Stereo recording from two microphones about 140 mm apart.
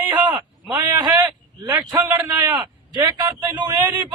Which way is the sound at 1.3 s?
25° right (ahead or behind).